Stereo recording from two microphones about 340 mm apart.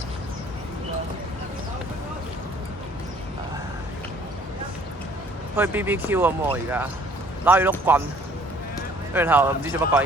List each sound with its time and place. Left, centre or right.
5.5 s speech: centre
9.1 s speech: centre